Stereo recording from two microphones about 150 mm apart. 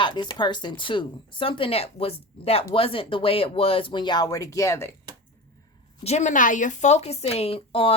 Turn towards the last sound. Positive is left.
turn(degrees=40)  # may be behind; listen again after turning